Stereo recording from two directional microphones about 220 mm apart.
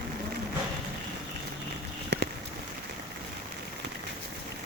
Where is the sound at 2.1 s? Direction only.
50° right (ahead or behind).